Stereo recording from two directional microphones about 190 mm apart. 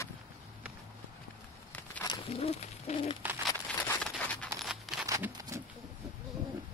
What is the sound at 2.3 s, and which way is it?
Bird, 35° left (ahead or behind).